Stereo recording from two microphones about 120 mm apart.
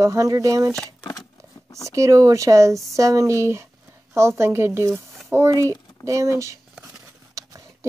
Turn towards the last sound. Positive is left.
turn(degrees=-25)  # may be behind; listen again after turning